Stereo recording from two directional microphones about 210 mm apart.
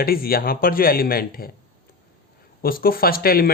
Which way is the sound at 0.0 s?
45° left (ahead or behind).